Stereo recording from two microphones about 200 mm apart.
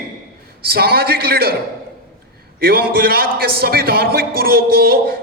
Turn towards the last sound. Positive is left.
turn(degrees=-50)  # may be behind; listen again after turning